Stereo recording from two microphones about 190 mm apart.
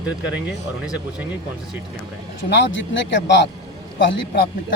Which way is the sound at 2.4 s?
70° left (ahead or behind).